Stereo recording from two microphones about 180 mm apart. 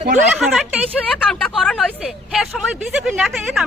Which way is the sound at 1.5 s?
Centre (ahead or behind).